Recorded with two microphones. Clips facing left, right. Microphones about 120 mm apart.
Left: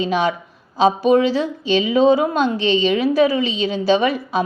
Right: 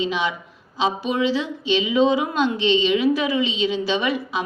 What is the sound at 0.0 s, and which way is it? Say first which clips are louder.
A woman's voice: left 5 dB; 45° left (ahead or behind).